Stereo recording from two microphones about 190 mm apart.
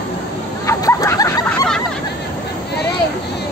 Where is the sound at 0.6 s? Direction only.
15° left (ahead or behind).